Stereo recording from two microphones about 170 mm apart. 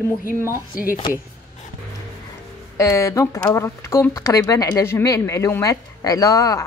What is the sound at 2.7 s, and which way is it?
Speech, 15° left (ahead or behind).